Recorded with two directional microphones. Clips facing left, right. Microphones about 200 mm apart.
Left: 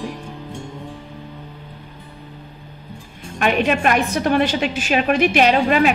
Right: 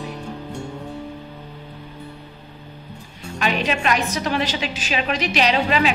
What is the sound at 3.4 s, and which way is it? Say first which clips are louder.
A woman's voice: left 5 dB; 50° left (ahead or behind).